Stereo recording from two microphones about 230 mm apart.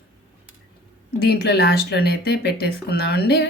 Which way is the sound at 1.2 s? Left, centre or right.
Left.